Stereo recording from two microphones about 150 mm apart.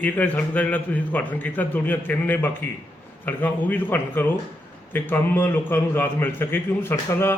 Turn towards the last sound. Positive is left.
turn(degrees=15)  # may be behind; listen again after turning